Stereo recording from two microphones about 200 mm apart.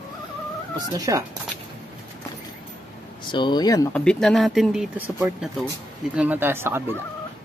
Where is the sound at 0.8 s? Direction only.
15° right (ahead or behind).